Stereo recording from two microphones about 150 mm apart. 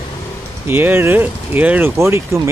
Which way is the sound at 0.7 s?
15° right (ahead or behind).